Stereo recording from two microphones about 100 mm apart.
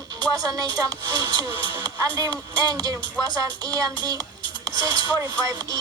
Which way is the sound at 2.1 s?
40° right (ahead or behind).